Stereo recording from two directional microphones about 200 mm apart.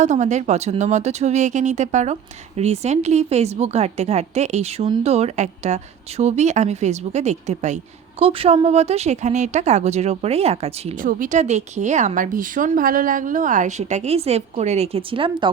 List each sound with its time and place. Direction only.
0.0 s speech: 35° right (ahead or behind)